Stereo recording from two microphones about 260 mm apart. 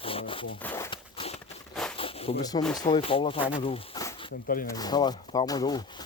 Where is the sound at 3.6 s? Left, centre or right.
Centre.